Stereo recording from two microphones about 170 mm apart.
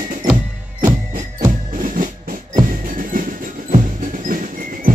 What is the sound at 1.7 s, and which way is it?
Music, 50° right (ahead or behind).